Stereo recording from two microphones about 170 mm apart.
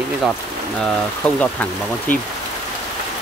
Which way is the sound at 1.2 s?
5° left (ahead or behind).